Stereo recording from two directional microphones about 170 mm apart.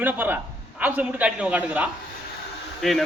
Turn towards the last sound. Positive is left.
turn(degrees=0)  # may be behind; listen again after turning